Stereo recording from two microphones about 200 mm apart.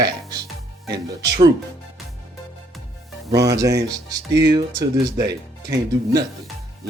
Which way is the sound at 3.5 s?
15° right (ahead or behind).